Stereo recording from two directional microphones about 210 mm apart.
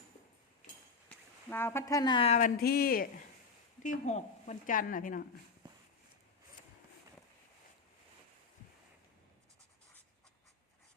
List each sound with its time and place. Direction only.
1.5 s speech: 10° left (ahead or behind); by 2.5 s 30° left (ahead or behind)
2.6 s speech: 45° left (ahead or behind)
3.8 s a woman's voice: 35° left (ahead or behind)